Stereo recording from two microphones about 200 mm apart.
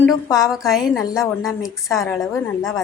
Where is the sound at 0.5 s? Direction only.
Centre (ahead or behind).